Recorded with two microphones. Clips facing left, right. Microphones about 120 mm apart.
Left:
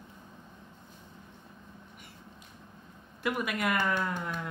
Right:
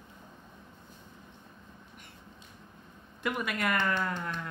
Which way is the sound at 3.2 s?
5° left (ahead or behind).